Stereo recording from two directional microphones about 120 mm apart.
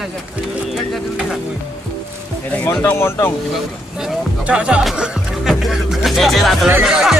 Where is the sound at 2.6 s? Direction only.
20° left (ahead or behind).